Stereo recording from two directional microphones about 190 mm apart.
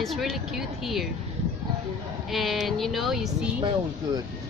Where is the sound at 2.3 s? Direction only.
Centre (ahead or behind).